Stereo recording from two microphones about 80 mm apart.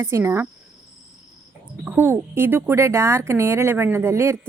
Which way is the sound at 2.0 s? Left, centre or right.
Right.